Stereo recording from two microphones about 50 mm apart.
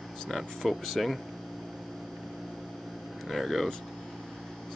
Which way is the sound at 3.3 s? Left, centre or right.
Centre.